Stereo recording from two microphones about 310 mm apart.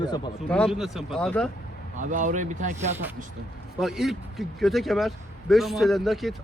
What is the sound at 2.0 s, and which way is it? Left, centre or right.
Speech, right.